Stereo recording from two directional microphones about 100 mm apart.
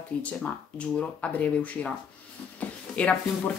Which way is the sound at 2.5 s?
15° left (ahead or behind).